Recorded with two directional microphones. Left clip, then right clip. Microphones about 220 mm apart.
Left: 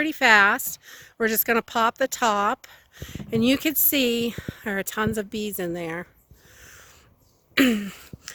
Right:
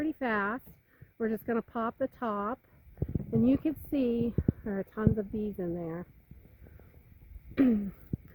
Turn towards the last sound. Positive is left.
turn(degrees=20)  # may be behind; listen again after turning